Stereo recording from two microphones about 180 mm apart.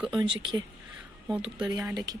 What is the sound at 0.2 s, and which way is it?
Speech, 25° right (ahead or behind).